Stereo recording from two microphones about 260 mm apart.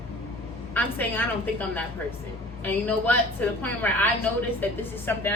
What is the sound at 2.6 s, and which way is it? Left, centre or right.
A woman's voice, centre.